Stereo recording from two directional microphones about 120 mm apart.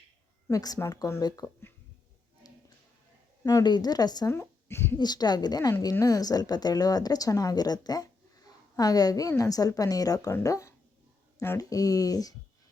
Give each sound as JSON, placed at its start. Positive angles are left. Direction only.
{"t": 0.5, "sound": "speech", "side_deg": 30}
{"t": 3.4, "sound": "speech", "side_deg": 35}
{"t": 4.3, "sound": "speech", "side_deg": 20}
{"t": 4.9, "sound": "speech", "side_deg": 35}